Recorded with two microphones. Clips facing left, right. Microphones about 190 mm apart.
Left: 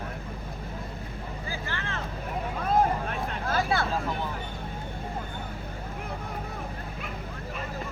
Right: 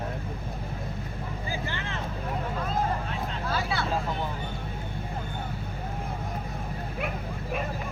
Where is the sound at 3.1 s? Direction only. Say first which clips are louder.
Left 1 dB; 50° left (ahead or behind).